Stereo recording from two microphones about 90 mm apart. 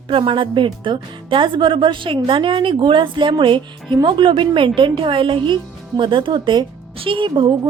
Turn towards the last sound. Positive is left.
turn(degrees=-60)  # may be behind; listen again after turning